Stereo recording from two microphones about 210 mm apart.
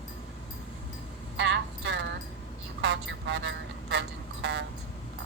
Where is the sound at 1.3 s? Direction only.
60° right (ahead or behind).